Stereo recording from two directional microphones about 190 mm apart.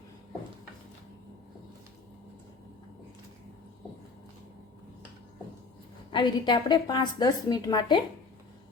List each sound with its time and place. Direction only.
6.1 s a woman's voice: 25° left (ahead or behind)